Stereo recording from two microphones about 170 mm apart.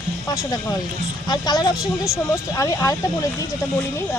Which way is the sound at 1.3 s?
25° left (ahead or behind).